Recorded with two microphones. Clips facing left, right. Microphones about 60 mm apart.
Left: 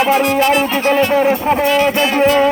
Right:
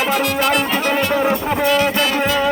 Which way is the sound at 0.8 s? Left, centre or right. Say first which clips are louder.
Left 5 dB; left.